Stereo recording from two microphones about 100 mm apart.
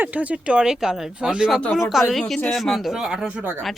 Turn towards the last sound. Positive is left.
turn(degrees=-5)  # may be behind; listen again after turning